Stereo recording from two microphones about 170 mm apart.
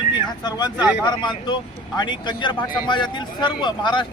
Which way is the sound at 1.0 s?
25° left (ahead or behind).